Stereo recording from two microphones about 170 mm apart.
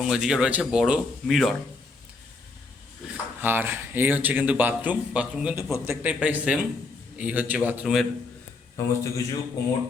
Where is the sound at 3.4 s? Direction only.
10° right (ahead or behind).